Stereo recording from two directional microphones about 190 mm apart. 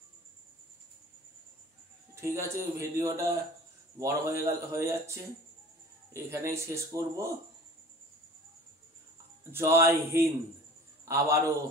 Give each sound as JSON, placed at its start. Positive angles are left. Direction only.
{"t": 2.1, "sound": "speech", "side_deg": -15}
{"t": 9.4, "sound": "speech", "side_deg": -15}